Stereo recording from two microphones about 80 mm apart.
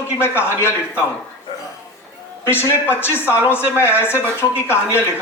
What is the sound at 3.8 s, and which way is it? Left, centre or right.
Speech, left.